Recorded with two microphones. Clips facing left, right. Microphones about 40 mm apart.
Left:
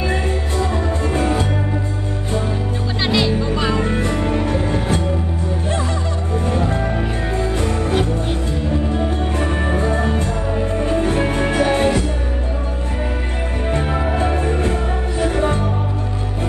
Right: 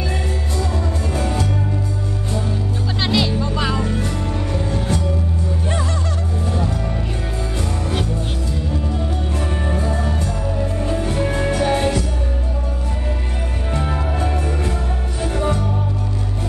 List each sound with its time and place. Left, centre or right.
1.1 s music: left
3.1 s music: centre
3.8 s music: left
6.4 s music: left
8.9 s music: left
11.6 s music: centre
13.8 s music: left